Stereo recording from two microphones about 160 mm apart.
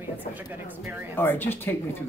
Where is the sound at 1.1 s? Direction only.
15° left (ahead or behind).